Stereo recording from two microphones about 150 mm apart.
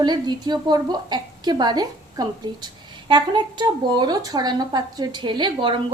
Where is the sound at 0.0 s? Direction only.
30° right (ahead or behind).